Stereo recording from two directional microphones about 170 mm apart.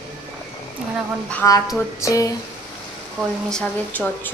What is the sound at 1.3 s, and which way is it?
Speech, 15° left (ahead or behind).